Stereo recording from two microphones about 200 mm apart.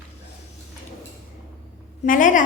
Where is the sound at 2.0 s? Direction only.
40° left (ahead or behind).